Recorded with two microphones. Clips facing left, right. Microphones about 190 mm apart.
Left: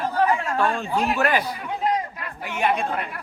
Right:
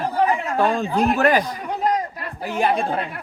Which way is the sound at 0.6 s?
35° right (ahead or behind).